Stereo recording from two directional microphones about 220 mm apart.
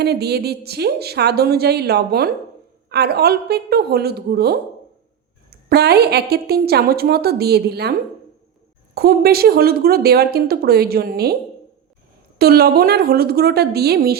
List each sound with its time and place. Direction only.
0.0 s a woman's voice: 45° right (ahead or behind)
9.0 s a woman's voice: 45° right (ahead or behind)
12.4 s a woman's voice: 45° right (ahead or behind)